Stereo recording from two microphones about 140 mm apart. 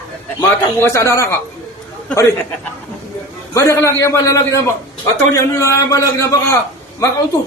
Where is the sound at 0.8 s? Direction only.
20° left (ahead or behind).